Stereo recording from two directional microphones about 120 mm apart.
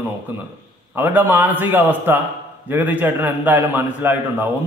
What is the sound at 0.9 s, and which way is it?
A man's voice, 15° right (ahead or behind).